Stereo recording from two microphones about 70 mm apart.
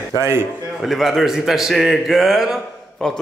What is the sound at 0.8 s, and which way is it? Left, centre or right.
Speech, centre.